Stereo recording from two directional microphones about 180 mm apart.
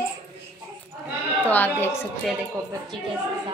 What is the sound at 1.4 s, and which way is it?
Speech, 10° left (ahead or behind).